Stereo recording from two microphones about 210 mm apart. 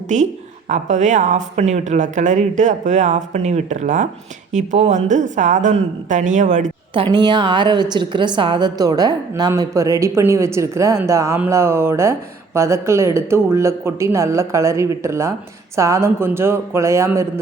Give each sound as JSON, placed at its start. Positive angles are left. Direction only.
{"t": 0.1, "sound": "speech", "side_deg": -35}
{"t": 6.9, "sound": "a woman's voice", "side_deg": -25}